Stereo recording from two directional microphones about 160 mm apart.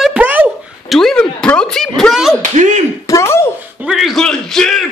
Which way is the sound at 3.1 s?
15° left (ahead or behind).